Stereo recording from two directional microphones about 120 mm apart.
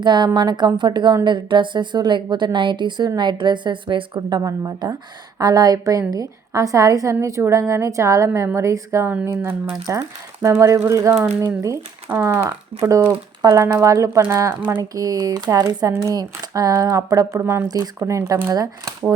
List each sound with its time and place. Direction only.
0.0 s a woman's voice: 40° right (ahead or behind); by 9.7 s 15° right (ahead or behind)
10.4 s a woman's voice: 25° right (ahead or behind)